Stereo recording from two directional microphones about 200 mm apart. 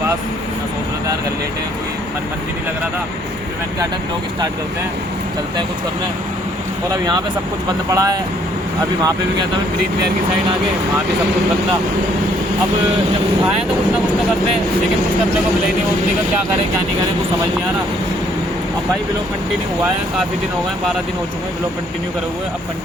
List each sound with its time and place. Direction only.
7.9 s speech: 15° right (ahead or behind)